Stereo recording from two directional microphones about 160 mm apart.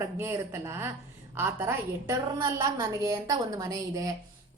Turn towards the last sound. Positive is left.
turn(degrees=-20)  # may be behind; listen again after turning